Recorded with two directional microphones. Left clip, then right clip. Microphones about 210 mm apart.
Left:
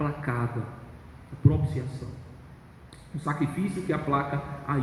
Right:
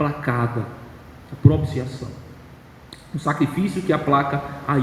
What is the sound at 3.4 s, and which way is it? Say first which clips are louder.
A man's voice: right 8 dB; 55° right (ahead or behind).